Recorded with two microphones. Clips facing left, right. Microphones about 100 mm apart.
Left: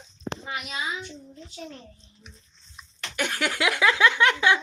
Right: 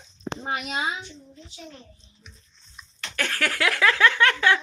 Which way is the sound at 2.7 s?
15° left (ahead or behind).